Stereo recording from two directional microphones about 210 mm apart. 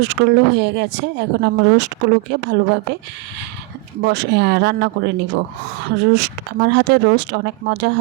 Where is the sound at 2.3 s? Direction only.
55° right (ahead or behind).